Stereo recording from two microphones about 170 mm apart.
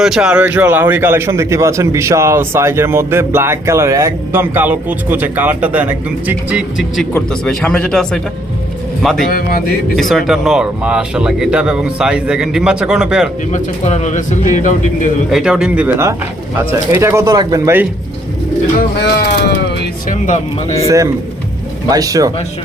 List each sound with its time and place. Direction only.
0.0 s a man's voice: 5° right (ahead or behind)
9.3 s a man's voice: 60° left (ahead or behind)
10.0 s speech: centre (ahead or behind)
13.5 s speech: 45° left (ahead or behind)
15.3 s a man's voice: 5° right (ahead or behind); by 17.7 s 20° right (ahead or behind)
19.1 s speech: 80° left
20.1 s speech: 45° left (ahead or behind)
20.8 s speech: 20° right (ahead or behind)